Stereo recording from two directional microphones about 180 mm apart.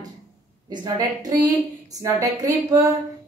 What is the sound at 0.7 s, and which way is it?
A woman's voice, 20° right (ahead or behind).